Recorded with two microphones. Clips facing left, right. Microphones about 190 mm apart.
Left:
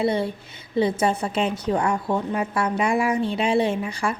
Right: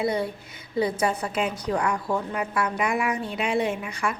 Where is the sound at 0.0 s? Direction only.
25° left (ahead or behind).